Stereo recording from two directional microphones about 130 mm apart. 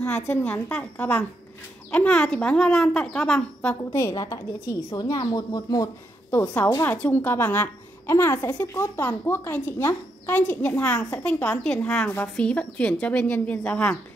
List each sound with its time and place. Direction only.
0.3 s a woman's voice: 20° left (ahead or behind)
4.0 s a woman's voice: 25° left (ahead or behind)
6.4 s a woman's voice: 15° left (ahead or behind)